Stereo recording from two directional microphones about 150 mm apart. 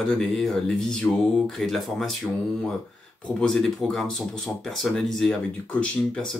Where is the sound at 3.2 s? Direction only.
5° left (ahead or behind).